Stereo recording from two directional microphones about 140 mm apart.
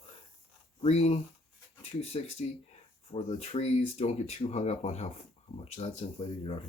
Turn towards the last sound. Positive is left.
turn(degrees=45)  # may be behind; listen again after turning